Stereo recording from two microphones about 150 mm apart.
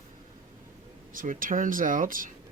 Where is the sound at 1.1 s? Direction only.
65° right (ahead or behind).